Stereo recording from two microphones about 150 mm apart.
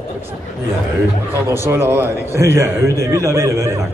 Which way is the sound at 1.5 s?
15° right (ahead or behind).